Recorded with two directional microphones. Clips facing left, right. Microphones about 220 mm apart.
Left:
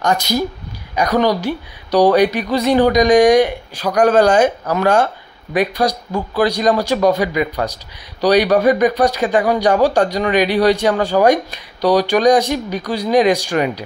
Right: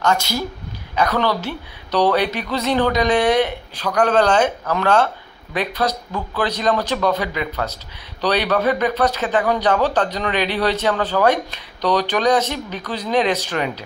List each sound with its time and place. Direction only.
0.0 s speech: 15° left (ahead or behind)